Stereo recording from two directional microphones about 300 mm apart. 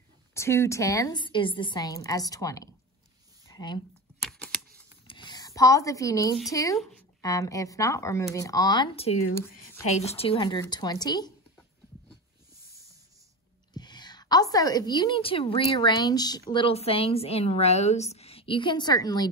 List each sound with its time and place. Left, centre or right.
0.3 s a woman's voice: centre
4.2 s typewriter: centre
5.0 s a sound: centre
6.5 s a woman's voice: centre
13.7 s a woman's voice: centre